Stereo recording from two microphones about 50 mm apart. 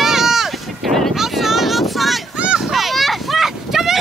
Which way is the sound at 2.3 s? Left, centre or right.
Right.